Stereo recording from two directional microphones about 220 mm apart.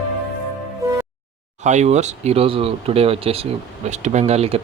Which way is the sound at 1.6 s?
30° right (ahead or behind).